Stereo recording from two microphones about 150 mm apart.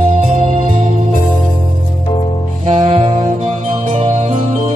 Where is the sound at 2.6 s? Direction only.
45° right (ahead or behind).